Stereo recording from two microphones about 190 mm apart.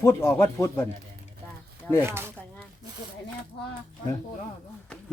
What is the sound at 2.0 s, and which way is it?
Speech, 10° right (ahead or behind).